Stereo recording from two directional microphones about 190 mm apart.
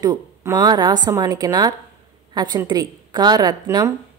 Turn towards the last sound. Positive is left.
turn(degrees=-20)  # may be behind; listen again after turning